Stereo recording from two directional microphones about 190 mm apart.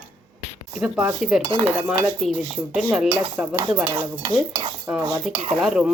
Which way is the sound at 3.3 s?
10° right (ahead or behind).